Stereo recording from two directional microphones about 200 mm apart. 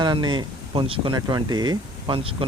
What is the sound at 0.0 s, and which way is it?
Speech, 20° right (ahead or behind).